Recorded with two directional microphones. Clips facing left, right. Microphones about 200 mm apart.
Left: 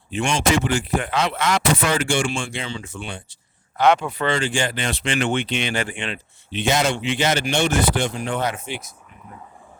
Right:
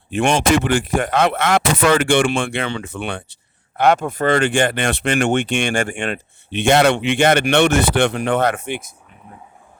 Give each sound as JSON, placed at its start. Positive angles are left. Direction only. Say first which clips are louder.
{"t": 0.1, "sound": "speech", "louder": "right 5 dB", "side_deg": -60}
{"t": 3.8, "sound": "speech", "louder": "right 2 dB", "side_deg": -50}
{"t": 5.0, "sound": "speech", "louder": "right 4 dB", "side_deg": -45}
{"t": 6.7, "sound": "speech", "louder": "right 7 dB", "side_deg": -60}